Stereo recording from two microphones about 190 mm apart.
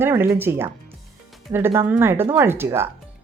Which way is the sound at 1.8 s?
10° right (ahead or behind).